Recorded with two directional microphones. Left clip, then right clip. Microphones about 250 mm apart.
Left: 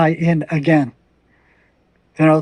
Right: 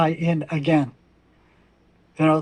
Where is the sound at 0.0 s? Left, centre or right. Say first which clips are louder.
Left 5 dB; left.